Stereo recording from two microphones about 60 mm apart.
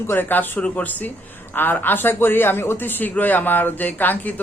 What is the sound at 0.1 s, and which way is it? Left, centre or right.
A man's voice, left.